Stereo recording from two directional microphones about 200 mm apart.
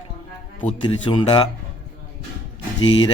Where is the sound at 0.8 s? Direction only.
25° left (ahead or behind).